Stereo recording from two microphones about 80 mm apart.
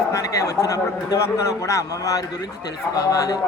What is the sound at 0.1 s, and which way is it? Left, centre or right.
A man's voice, left.